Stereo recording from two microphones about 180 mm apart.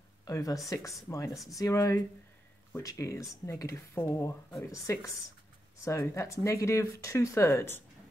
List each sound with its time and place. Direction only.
0.2 s speech: 20° left (ahead or behind)